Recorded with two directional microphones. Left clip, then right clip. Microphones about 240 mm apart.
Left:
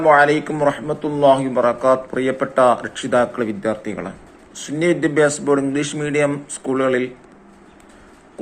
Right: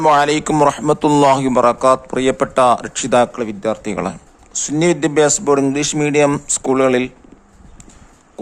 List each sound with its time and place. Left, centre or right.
0.0 s a man's voice: right
6.3 s a man's voice: right